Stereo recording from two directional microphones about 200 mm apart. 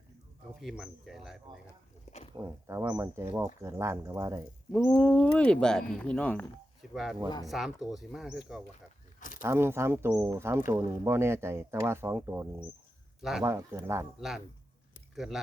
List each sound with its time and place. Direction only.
0.6 s speech: centre (ahead or behind)
2.0 s a sound: 35° left (ahead or behind)
2.3 s speech: 15° right (ahead or behind)
4.7 s speech: 10° left (ahead or behind)
9.4 s speech: 10° right (ahead or behind)
14.2 s speech: centre (ahead or behind)